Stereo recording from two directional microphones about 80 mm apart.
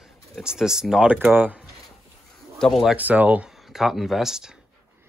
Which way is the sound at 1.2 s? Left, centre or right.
Centre.